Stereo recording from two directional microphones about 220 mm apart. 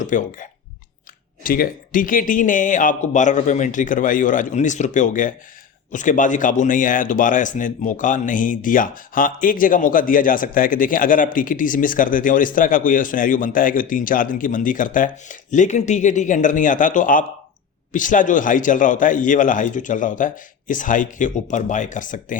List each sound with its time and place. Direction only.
0.0 s speech: 35° left (ahead or behind)
1.5 s speech: 40° left (ahead or behind)